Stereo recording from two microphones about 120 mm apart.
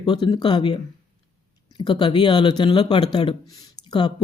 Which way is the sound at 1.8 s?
40° left (ahead or behind).